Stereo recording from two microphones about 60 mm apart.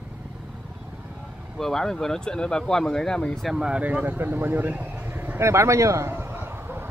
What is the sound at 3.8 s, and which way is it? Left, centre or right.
Speech, right.